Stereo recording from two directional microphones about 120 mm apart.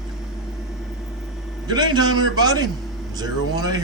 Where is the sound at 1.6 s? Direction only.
35° right (ahead or behind).